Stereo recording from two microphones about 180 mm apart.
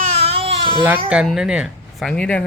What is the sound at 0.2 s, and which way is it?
Baby cry, 35° right (ahead or behind).